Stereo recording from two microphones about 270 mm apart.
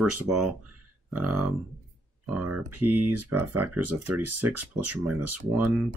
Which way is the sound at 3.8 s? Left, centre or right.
Right.